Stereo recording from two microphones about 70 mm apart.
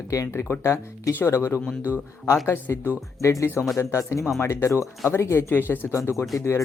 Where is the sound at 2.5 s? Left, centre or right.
Left.